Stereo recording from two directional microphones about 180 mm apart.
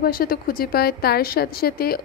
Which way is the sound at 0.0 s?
55° left (ahead or behind).